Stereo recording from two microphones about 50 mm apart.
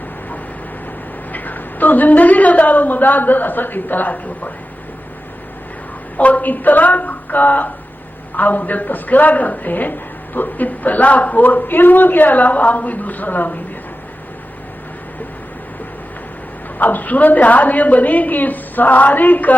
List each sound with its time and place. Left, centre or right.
1.3 s a woman's voice: left
6.1 s a woman's voice: left
16.7 s a woman's voice: left